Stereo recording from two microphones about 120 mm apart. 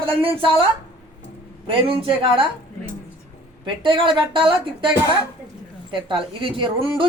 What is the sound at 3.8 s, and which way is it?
A woman's voice, 45° right (ahead or behind).